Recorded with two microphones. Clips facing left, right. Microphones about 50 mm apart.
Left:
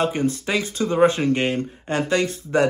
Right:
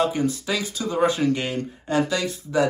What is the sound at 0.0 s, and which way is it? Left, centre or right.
Speech, left.